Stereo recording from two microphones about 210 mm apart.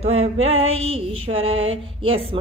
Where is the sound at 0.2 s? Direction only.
30° right (ahead or behind).